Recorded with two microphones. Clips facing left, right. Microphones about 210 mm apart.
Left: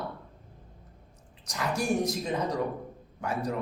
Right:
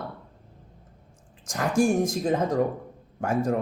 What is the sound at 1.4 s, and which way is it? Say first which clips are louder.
Speech: right 8 dB; 50° right (ahead or behind).